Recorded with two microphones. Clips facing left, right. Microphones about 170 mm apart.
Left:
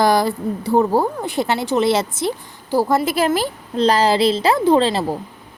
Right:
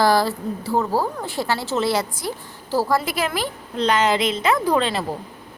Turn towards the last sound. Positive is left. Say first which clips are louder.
# left 5 dB
turn(degrees=30)  # may be behind; listen again after turning